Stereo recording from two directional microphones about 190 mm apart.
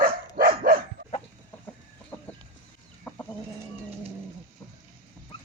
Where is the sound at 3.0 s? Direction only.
10° left (ahead or behind).